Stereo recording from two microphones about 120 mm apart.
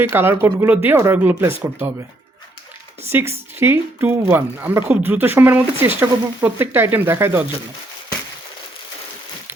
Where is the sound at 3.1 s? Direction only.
20° right (ahead or behind).